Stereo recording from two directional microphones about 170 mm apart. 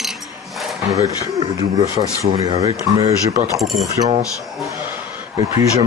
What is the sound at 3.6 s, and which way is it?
Speech, centre (ahead or behind).